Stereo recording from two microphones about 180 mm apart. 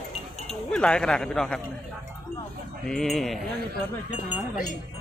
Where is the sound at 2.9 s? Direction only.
Centre (ahead or behind).